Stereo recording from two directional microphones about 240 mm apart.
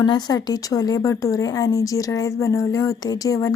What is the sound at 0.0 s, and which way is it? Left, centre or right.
A woman's voice, centre.